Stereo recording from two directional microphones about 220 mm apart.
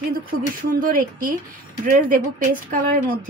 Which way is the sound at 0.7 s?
40° right (ahead or behind).